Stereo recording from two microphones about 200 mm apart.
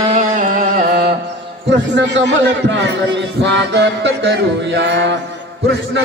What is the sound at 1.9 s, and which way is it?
A man's voice, 65° right (ahead or behind).